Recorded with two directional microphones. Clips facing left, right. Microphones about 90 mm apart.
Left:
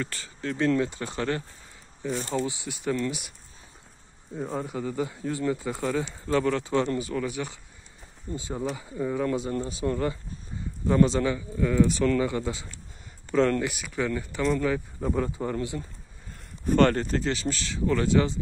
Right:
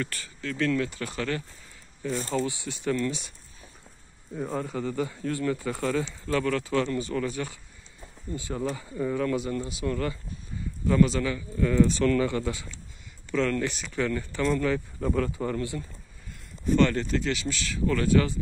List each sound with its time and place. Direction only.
0.0 s speech: 25° left (ahead or behind)
4.4 s speech: 20° left (ahead or behind)
7.0 s speech: 10° left (ahead or behind)
9.2 s speech: 25° left (ahead or behind)
11.5 s speech: 10° left (ahead or behind)
13.3 s speech: 35° left (ahead or behind)
13.6 s speech: 10° left (ahead or behind)
16.6 s speech: 50° left (ahead or behind); by 18.4 s 20° left (ahead or behind)